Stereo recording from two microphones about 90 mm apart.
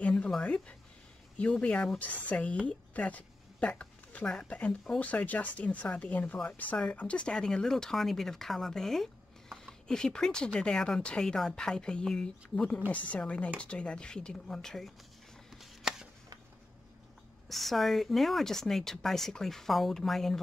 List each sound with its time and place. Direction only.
0.0 s speech: 10° left (ahead or behind)
15.5 s chopping: 5° right (ahead or behind)
17.5 s speech: centre (ahead or behind)